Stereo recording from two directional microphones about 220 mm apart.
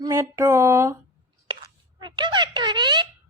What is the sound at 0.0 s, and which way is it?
Speech, 10° right (ahead or behind).